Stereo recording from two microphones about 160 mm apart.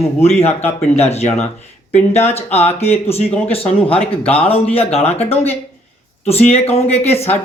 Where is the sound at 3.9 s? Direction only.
10° left (ahead or behind).